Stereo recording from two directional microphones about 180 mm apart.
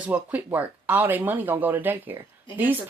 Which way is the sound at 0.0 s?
10° right (ahead or behind).